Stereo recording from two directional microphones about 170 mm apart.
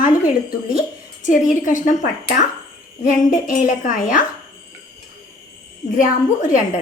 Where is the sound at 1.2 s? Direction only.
50° left (ahead or behind).